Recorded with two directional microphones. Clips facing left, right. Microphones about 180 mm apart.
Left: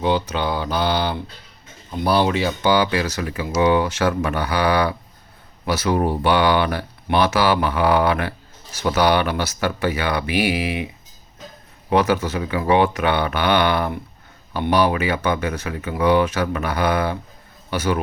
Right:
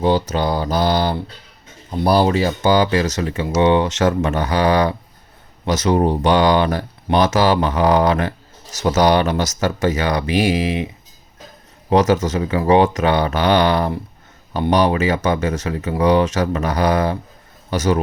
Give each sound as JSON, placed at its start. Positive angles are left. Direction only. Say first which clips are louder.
{"t": 0.0, "sound": "speech", "louder": "right 3 dB", "side_deg": -40}
{"t": 3.2, "sound": "speech", "louder": "right 3 dB", "side_deg": -30}
{"t": 4.6, "sound": "speech", "louder": "right 3 dB", "side_deg": -40}
{"t": 5.8, "sound": "speech", "louder": "right 4 dB", "side_deg": -20}
{"t": 6.2, "sound": "speech", "louder": "right 2 dB", "side_deg": -40}
{"t": 11.9, "sound": "a man's voice", "louder": "right 3 dB", "side_deg": -40}